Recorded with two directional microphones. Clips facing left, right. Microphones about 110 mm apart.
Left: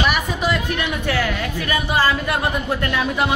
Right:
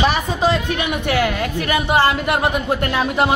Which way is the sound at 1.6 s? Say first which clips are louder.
Right 4 dB; 25° right (ahead or behind).